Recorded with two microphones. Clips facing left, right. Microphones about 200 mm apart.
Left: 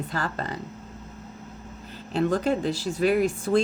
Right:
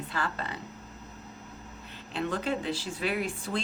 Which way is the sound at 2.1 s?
45° left (ahead or behind).